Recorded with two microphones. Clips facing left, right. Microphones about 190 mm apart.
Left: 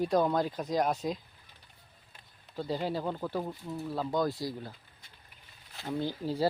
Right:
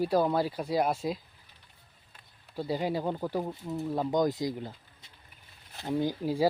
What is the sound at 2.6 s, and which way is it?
Speech, 10° right (ahead or behind).